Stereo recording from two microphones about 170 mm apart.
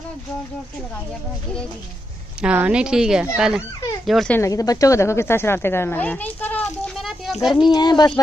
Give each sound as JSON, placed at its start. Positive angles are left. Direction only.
{"t": 2.4, "sound": "speech", "side_deg": -5}
{"t": 4.4, "sound": "speech", "side_deg": 20}
{"t": 7.7, "sound": "speech", "side_deg": 25}